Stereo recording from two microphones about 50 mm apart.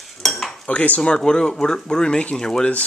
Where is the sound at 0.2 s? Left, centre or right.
Centre.